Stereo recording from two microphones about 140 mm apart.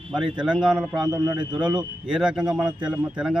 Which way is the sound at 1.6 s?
5° right (ahead or behind).